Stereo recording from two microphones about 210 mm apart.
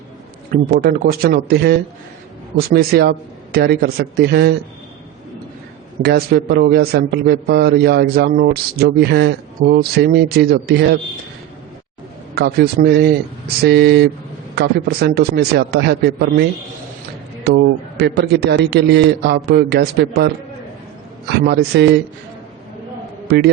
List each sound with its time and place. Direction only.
0.5 s a man's voice: 45° right (ahead or behind)
6.0 s a man's voice: 45° right (ahead or behind)
12.3 s a man's voice: 50° right (ahead or behind)
21.4 s a man's voice: 50° right (ahead or behind)